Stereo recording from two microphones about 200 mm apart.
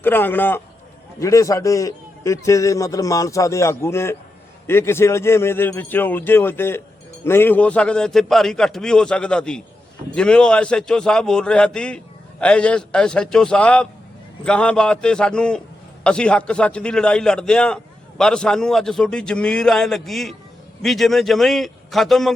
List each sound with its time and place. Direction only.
0.0 s a man's voice: 10° left (ahead or behind)